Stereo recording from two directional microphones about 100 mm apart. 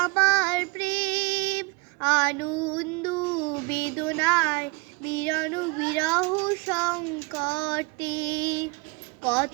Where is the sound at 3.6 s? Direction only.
15° left (ahead or behind).